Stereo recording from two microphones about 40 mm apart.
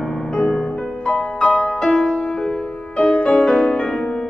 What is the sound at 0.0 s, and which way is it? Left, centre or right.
Music, centre.